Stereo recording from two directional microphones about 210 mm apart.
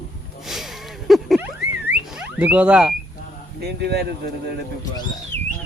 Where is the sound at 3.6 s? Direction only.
50° right (ahead or behind).